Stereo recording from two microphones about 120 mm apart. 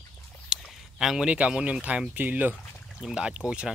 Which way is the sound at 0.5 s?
Centre (ahead or behind).